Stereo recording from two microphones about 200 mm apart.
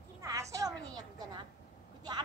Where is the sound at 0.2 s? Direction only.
15° right (ahead or behind).